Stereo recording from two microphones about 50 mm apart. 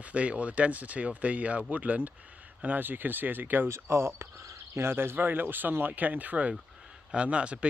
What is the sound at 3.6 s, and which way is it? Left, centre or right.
Speech, right.